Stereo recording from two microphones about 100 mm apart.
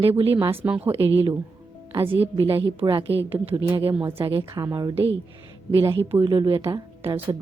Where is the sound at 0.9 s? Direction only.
65° right (ahead or behind).